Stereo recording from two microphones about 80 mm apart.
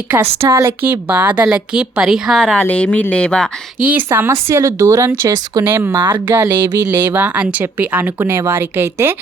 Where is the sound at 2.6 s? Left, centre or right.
Centre.